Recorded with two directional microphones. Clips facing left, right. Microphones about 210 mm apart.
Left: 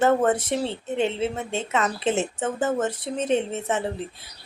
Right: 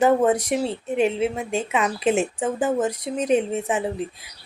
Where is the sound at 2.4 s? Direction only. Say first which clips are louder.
Right 2 dB; 15° right (ahead or behind).